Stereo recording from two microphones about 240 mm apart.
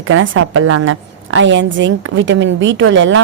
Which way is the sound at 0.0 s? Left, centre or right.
Right.